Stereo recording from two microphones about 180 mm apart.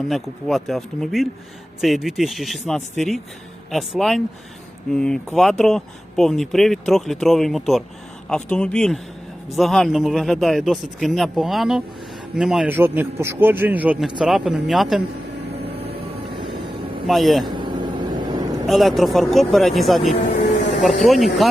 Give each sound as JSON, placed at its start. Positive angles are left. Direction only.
{"t": 0.1, "sound": "a man's voice", "side_deg": 0}
{"t": 17.1, "sound": "speech", "side_deg": 0}
{"t": 17.6, "sound": "vehicle", "side_deg": -25}
{"t": 18.6, "sound": "speech", "side_deg": 0}